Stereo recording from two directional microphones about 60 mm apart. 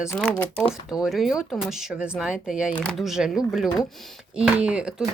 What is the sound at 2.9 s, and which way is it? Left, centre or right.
Speech, centre.